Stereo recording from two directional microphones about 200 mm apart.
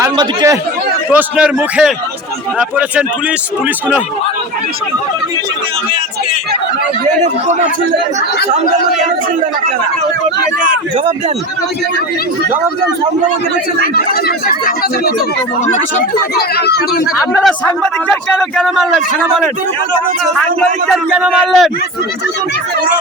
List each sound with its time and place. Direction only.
0.0 s a man's voice: 15° right (ahead or behind)
10.6 s a man's voice: 40° right (ahead or behind)
13.8 s speech: 50° left (ahead or behind)
16.3 s speech: 55° left (ahead or behind)
17.4 s a man's voice: 5° left (ahead or behind)